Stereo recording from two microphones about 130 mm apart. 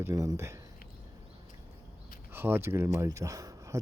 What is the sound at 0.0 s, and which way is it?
Speech, 25° right (ahead or behind).